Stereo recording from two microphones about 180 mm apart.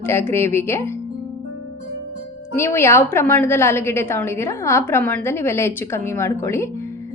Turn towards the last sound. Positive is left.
turn(degrees=15)  # may be behind; listen again after turning